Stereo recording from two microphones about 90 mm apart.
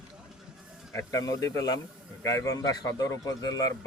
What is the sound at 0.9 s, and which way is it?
A man's voice, 35° left (ahead or behind).